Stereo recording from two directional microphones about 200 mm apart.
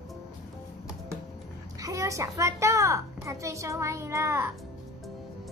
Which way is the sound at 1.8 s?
15° right (ahead or behind).